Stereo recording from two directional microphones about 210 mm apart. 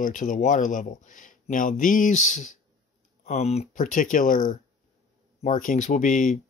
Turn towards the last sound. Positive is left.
turn(degrees=35)  # may be behind; listen again after turning